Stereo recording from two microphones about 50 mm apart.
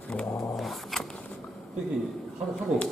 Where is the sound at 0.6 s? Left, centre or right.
Centre.